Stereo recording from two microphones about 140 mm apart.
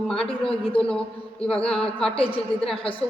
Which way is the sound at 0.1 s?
5° left (ahead or behind).